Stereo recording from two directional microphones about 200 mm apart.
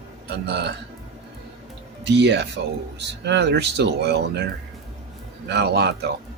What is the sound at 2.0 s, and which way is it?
Speech, 60° right (ahead or behind).